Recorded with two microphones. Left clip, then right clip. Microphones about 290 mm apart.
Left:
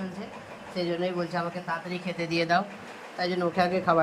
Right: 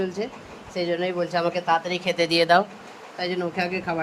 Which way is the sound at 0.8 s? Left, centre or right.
Right.